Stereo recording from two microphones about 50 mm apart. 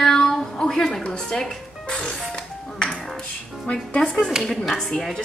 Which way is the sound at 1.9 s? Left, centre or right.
Left.